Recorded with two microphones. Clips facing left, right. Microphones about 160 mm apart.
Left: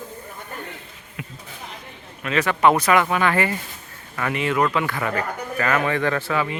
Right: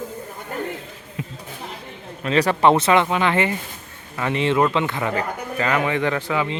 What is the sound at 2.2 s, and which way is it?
A man's voice, 35° right (ahead or behind).